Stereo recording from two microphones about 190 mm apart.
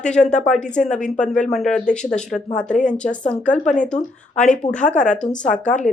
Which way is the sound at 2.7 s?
40° left (ahead or behind).